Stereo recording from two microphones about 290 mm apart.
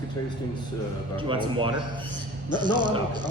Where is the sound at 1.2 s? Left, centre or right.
Centre.